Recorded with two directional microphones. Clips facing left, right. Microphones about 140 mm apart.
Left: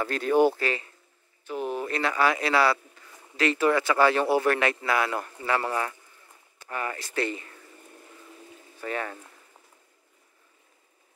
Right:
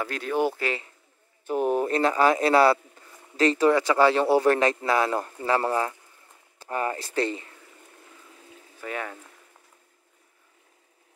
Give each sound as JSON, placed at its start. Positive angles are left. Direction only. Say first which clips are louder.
{"t": 0.0, "sound": "speech", "louder": "left 4 dB", "side_deg": -5}
{"t": 0.6, "sound": "speech", "louder": "even", "side_deg": -20}
{"t": 1.5, "sound": "speech", "louder": "right 6 dB", "side_deg": -45}
{"t": 3.6, "sound": "speech", "louder": "right 2 dB", "side_deg": -20}
{"t": 8.8, "sound": "speech", "louder": "left 1 dB", "side_deg": -5}